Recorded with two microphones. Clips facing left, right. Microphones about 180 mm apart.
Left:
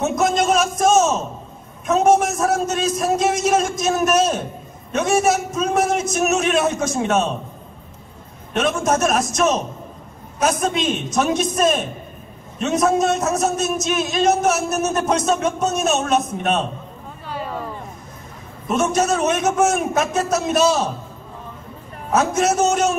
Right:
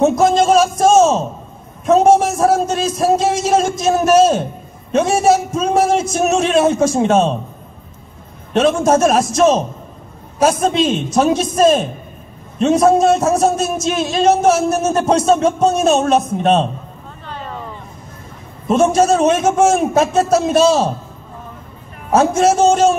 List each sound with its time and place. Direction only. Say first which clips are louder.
0.0 s a sound: right 6 dB; 30° right (ahead or behind)
1.9 s a man's voice: right 5 dB; 30° right (ahead or behind)
8.5 s a man's voice: right 6 dB; 30° right (ahead or behind)
17.3 s vehicle: left 1 dB; 10° left (ahead or behind)
18.7 s a man's voice: right 6 dB; 30° right (ahead or behind)
22.1 s a man's voice: right 5 dB; 30° right (ahead or behind)